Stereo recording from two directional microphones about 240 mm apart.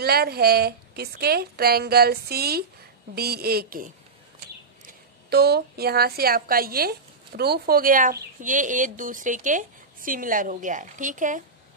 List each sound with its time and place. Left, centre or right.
0.0 s a woman's voice: right